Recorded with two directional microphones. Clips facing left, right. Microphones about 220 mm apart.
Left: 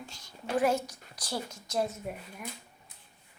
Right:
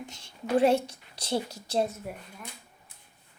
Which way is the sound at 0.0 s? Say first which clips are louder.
Right 4 dB; 25° right (ahead or behind).